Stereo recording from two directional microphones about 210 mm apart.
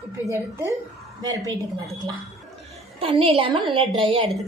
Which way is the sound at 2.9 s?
25° right (ahead or behind).